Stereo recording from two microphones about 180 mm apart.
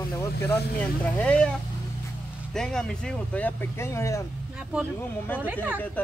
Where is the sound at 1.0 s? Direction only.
5° left (ahead or behind).